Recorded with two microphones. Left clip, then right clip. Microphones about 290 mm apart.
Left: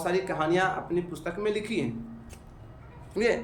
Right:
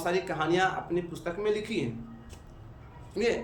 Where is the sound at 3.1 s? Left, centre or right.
Centre.